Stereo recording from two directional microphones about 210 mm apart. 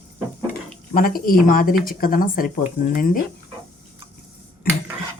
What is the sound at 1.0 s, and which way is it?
Speech, 45° left (ahead or behind).